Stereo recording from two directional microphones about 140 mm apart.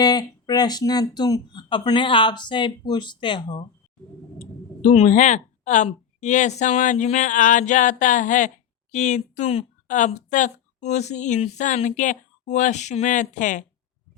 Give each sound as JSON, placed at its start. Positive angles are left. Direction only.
{"t": 0.0, "sound": "speech", "side_deg": 30}
{"t": 4.4, "sound": "a woman's voice", "side_deg": 55}
{"t": 9.8, "sound": "a woman's voice", "side_deg": 60}